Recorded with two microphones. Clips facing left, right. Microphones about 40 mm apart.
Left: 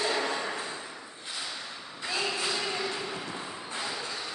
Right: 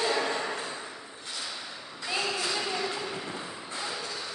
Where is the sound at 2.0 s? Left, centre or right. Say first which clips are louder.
Even; centre.